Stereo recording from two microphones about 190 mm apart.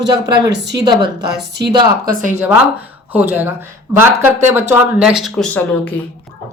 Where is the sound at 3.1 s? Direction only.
10° right (ahead or behind).